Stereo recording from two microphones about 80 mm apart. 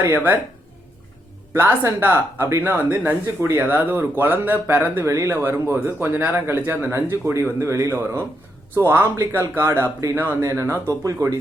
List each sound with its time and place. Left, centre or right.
0.1 s speech: right
1.5 s speech: right
5.0 s speech: right
5.3 s speech: right
10.4 s speech: right